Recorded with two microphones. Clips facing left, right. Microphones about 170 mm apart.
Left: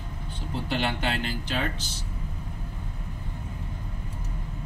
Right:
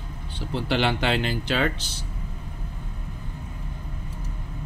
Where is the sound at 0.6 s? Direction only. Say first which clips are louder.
Right 5 dB; 90° right.